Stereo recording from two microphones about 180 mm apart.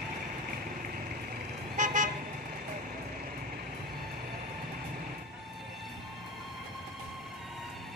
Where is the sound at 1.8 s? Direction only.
45° right (ahead or behind).